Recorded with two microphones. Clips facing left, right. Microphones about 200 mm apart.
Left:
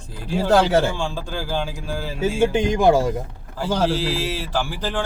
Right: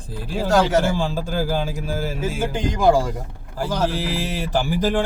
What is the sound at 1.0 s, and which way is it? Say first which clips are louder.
Speech: right 4 dB; 10° right (ahead or behind).